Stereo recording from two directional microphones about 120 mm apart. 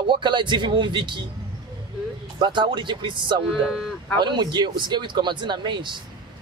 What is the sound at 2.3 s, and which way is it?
A man's voice, 40° right (ahead or behind).